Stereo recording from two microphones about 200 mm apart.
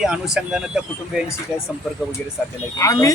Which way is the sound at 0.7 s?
5° right (ahead or behind).